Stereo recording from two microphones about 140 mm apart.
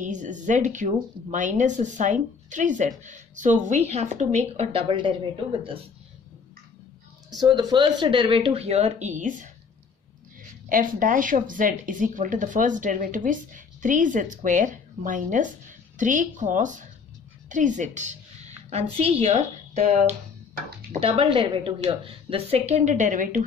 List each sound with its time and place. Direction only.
0.0 s a woman's voice: 65° right (ahead or behind); by 5.9 s 40° right (ahead or behind)
7.2 s speech: 30° right (ahead or behind); by 9.5 s 60° right (ahead or behind)
10.7 s a woman's voice: 75° right (ahead or behind); by 18.1 s 60° right (ahead or behind)
18.7 s a woman's voice: 45° right (ahead or behind)
21.0 s a woman's voice: 40° right (ahead or behind); by 23.4 s 70° right (ahead or behind)